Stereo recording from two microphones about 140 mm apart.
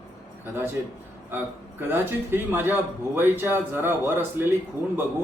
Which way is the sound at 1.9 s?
15° right (ahead or behind).